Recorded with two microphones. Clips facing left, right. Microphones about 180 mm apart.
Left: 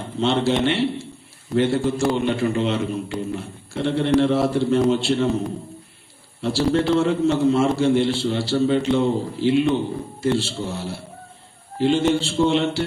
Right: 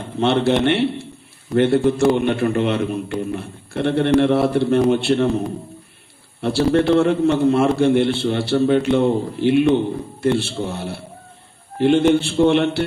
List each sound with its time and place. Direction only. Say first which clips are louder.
0.2 s a man's voice: right 3 dB; 60° right (ahead or behind)
6.4 s a man's voice: right 3 dB; 60° right (ahead or behind)